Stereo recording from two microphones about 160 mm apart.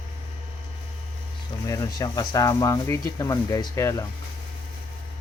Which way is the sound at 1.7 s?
20° left (ahead or behind).